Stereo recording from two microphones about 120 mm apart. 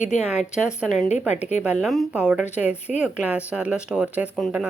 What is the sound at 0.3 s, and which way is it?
Speech, 10° right (ahead or behind).